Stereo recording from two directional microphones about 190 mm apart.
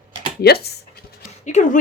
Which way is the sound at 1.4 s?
40° left (ahead or behind).